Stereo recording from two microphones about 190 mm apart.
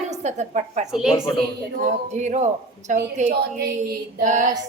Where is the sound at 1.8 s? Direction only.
40° right (ahead or behind).